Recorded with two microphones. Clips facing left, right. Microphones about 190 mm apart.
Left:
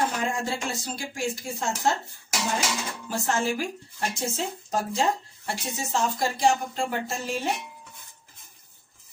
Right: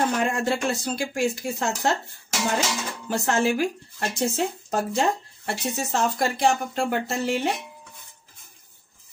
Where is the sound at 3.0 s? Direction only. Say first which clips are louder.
Right 4 dB; 65° right (ahead or behind).